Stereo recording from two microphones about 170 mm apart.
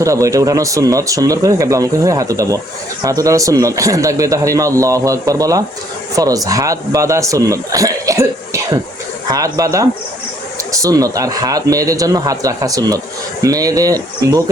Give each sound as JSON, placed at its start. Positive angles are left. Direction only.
{"t": 0.0, "sound": "a man's voice", "side_deg": -20}